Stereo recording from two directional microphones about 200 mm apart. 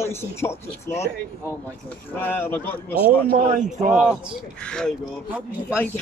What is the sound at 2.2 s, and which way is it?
Speech, 10° left (ahead or behind).